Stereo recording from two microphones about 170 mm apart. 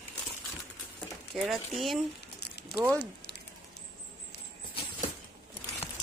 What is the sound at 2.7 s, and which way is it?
Speech, 70° left (ahead or behind).